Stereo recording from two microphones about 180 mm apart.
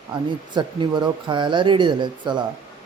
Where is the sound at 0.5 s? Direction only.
25° right (ahead or behind).